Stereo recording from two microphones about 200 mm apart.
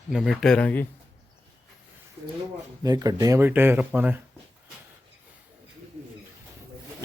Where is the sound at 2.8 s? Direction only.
20° right (ahead or behind).